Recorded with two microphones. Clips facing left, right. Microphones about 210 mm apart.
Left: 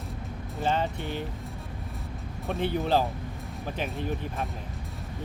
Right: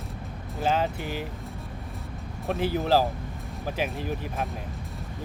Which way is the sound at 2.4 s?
5° right (ahead or behind).